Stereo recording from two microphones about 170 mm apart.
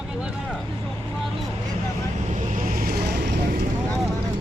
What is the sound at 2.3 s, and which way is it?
Vehicle, 50° right (ahead or behind).